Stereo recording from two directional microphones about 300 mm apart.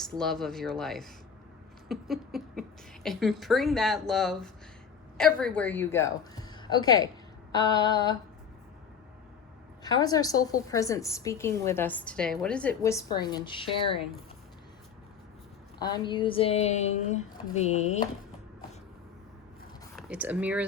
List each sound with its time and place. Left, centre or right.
0.0 s a woman's voice: centre
9.8 s a woman's voice: centre
15.8 s a woman's voice: centre
20.0 s speech: centre